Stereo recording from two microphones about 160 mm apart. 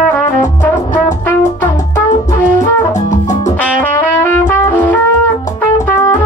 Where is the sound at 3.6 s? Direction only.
10° left (ahead or behind).